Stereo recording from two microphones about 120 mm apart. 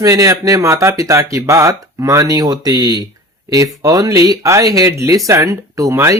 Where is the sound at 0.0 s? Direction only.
25° right (ahead or behind).